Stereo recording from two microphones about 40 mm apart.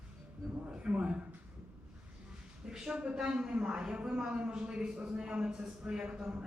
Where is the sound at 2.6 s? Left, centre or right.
Centre.